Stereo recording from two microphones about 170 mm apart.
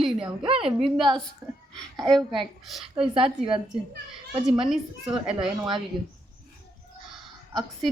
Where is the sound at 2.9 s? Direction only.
35° right (ahead or behind).